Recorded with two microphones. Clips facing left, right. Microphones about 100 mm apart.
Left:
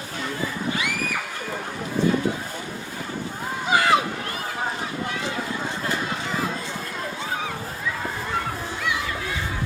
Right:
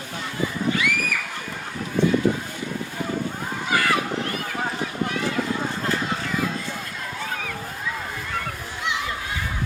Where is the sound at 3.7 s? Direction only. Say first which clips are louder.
Left 3 dB; 20° left (ahead or behind).